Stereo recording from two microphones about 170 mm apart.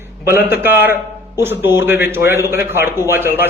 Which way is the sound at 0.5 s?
10° right (ahead or behind).